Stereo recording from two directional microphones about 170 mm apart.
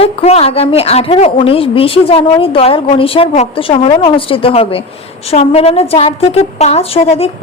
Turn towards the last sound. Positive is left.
turn(degrees=35)  # may be behind; listen again after turning